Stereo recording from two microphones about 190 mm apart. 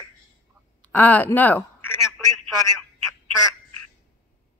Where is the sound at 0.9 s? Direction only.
10° left (ahead or behind).